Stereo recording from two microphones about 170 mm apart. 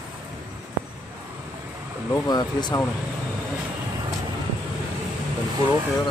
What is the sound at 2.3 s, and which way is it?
Vehicle, 25° left (ahead or behind).